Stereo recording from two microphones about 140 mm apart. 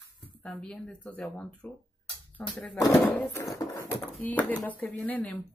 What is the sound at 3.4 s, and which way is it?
Speech, 25° left (ahead or behind).